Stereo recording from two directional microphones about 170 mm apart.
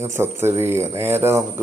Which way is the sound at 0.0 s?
15° right (ahead or behind).